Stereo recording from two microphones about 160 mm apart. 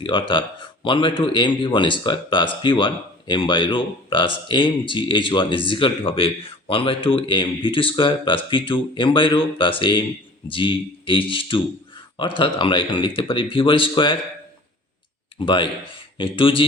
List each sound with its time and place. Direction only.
0.0 s a man's voice: 30° left (ahead or behind)
15.4 s a man's voice: 30° left (ahead or behind)